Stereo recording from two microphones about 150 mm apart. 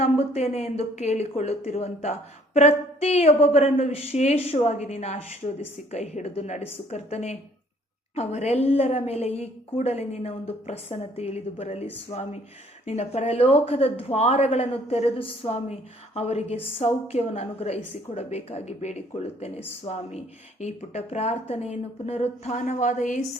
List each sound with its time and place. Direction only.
0.0 s speech: 45° left (ahead or behind)